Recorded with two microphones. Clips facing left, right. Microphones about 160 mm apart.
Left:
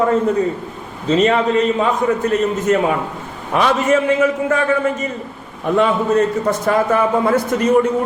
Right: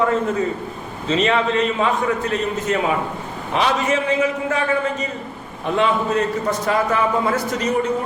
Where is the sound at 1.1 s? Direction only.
40° left (ahead or behind).